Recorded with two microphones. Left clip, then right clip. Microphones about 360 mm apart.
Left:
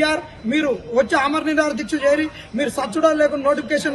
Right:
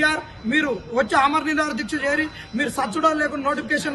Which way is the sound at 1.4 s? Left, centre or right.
Centre.